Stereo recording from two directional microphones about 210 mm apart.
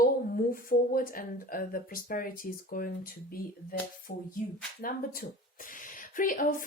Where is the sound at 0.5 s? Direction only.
45° left (ahead or behind).